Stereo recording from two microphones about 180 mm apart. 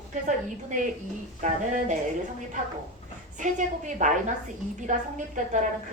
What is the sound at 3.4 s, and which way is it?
Speech, 45° right (ahead or behind).